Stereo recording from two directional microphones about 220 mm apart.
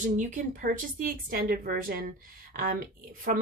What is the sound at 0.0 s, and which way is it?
Speech, 35° right (ahead or behind).